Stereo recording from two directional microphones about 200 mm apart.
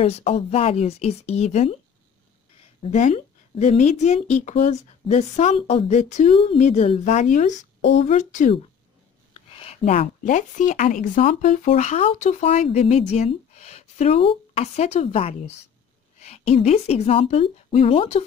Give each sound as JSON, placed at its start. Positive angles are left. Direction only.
{"t": 0.0, "sound": "speech", "side_deg": 30}
{"t": 2.8, "sound": "speech", "side_deg": 35}
{"t": 9.5, "sound": "speech", "side_deg": 30}